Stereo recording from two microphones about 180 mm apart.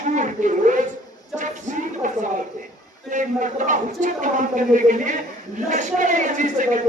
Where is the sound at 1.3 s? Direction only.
45° right (ahead or behind).